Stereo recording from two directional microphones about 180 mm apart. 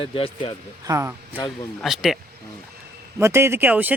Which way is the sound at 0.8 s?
15° right (ahead or behind).